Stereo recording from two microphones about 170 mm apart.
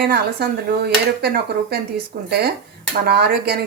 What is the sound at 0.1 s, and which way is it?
Dishes, 70° right (ahead or behind).